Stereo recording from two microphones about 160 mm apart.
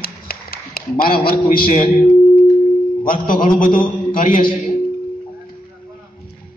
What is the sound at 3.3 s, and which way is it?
A man's voice, 60° left (ahead or behind).